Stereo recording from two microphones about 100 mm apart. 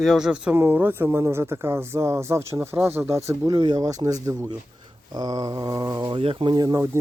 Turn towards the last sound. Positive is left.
turn(degrees=-40)  # may be behind; listen again after turning